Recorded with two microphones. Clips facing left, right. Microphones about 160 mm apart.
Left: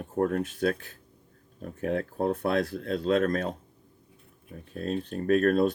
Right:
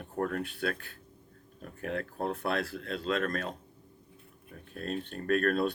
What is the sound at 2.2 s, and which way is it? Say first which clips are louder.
Speech: left 6 dB; 40° left (ahead or behind).